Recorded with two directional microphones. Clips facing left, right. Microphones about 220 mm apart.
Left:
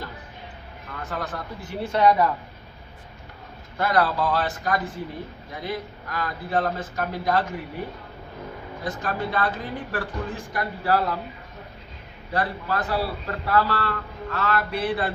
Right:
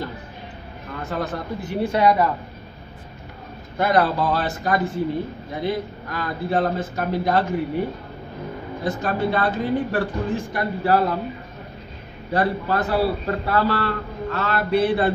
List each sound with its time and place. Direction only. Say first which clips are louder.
1.0 s a man's voice: right 5 dB; 25° right (ahead or behind); by 2.2 s 5° right (ahead or behind)
3.7 s a man's voice: right 3 dB; 20° right (ahead or behind)
8.8 s a man's voice: right 6 dB; 25° right (ahead or behind)
12.3 s a man's voice: right 5 dB; 25° right (ahead or behind)